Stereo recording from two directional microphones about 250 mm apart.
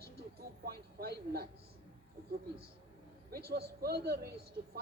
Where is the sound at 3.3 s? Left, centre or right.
Right.